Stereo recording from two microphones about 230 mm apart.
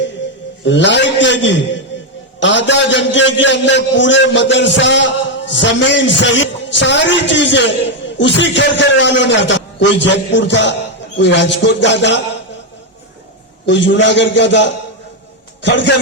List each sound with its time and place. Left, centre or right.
0.6 s a man's voice: left
13.7 s a man's voice: left